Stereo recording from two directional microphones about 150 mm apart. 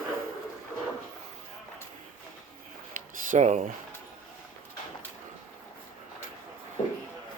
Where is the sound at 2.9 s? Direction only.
55° right (ahead or behind).